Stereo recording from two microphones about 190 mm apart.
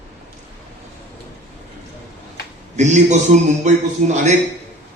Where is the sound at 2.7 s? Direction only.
40° right (ahead or behind).